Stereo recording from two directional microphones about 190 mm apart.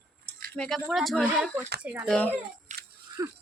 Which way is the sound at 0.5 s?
5° left (ahead or behind).